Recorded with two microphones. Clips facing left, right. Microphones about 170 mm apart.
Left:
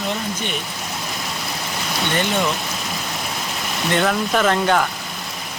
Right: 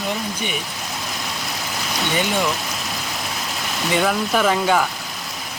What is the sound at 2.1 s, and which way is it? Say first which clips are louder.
Speech: even; 5° right (ahead or behind).